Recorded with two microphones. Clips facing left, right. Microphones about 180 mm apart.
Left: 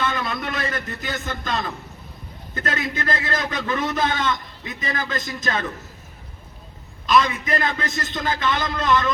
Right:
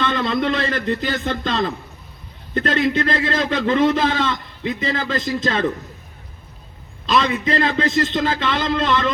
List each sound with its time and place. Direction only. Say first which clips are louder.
0.0 s a man's voice: right 6 dB; 25° right (ahead or behind)
7.1 s a man's voice: right 1 dB; 25° right (ahead or behind)